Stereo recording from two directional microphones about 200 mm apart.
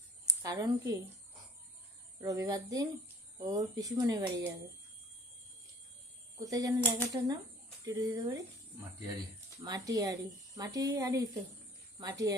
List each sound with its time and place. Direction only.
0.3 s speech: 20° right (ahead or behind)
2.2 s speech: 15° right (ahead or behind)
6.4 s speech: 15° right (ahead or behind)
9.6 s speech: 20° right (ahead or behind)